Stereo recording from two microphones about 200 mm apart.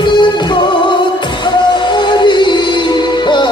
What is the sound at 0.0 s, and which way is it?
Music, 25° left (ahead or behind).